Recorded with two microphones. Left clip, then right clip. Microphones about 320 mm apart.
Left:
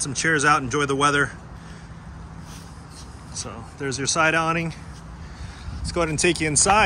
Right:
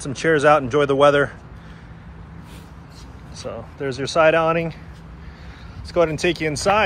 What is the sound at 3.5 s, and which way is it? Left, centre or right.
Speech, centre.